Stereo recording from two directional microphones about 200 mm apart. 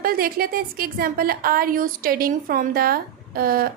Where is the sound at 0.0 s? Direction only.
45° right (ahead or behind).